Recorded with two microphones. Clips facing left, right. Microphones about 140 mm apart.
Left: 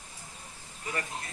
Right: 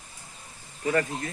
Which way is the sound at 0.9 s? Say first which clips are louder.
Right 10 dB; 50° right (ahead or behind).